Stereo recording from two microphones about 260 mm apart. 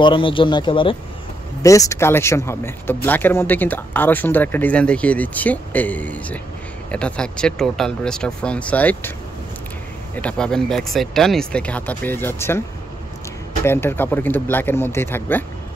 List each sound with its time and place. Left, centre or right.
0.0 s speech: centre
10.1 s speech: centre
13.7 s speech: centre